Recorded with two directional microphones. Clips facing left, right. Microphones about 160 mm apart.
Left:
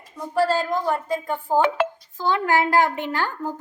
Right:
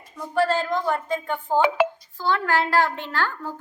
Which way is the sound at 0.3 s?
10° left (ahead or behind).